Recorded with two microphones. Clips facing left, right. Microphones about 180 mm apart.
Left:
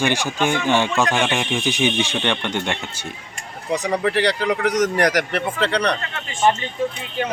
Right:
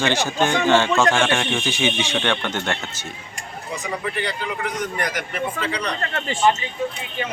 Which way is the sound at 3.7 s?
70° left (ahead or behind).